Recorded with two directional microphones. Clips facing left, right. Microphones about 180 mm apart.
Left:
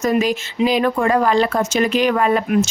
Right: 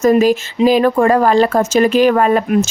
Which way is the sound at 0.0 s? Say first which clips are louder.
Right 7 dB; 40° right (ahead or behind).